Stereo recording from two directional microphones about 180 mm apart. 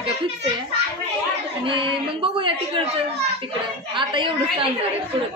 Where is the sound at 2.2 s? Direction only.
30° right (ahead or behind).